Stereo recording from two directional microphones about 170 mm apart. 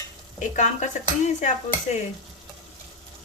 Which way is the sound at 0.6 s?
45° left (ahead or behind).